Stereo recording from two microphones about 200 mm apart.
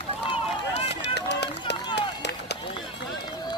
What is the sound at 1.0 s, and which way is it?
Run, 60° left (ahead or behind).